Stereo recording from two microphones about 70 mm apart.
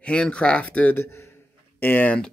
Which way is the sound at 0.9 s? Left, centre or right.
Left.